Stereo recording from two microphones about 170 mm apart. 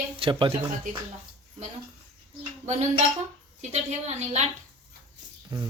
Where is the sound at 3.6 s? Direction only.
40° right (ahead or behind).